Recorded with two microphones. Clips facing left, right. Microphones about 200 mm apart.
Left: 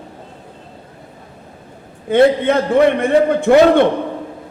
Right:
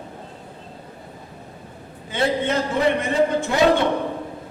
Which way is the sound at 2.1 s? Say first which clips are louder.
Left 10 dB; 55° left (ahead or behind).